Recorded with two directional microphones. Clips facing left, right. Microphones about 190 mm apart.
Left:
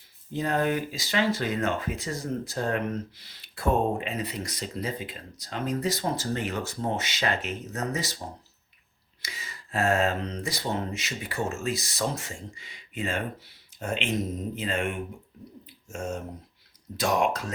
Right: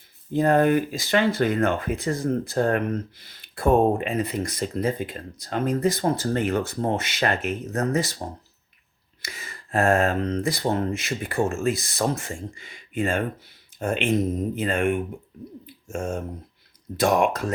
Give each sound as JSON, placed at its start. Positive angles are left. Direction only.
{"t": 0.3, "sound": "speech", "side_deg": -55}
{"t": 9.2, "sound": "speech", "side_deg": -55}